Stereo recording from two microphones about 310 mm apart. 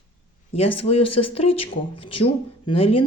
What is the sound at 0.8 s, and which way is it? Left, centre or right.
Speech, centre.